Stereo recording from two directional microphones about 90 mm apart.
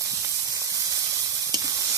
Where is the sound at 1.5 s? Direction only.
40° right (ahead or behind).